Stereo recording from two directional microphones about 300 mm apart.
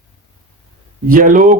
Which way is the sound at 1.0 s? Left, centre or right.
Right.